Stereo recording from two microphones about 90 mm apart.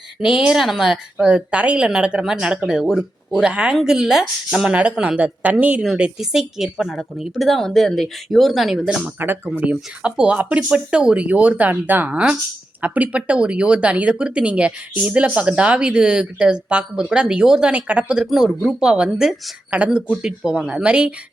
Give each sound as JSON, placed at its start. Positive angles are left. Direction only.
{"t": 0.2, "sound": "speech", "side_deg": -10}
{"t": 5.8, "sound": "a woman's voice", "side_deg": -5}
{"t": 9.1, "sound": "speech", "side_deg": -20}